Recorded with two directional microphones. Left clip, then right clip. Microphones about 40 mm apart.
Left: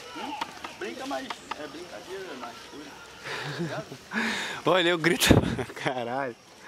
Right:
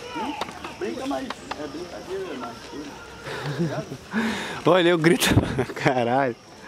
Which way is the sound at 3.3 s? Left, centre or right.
Left.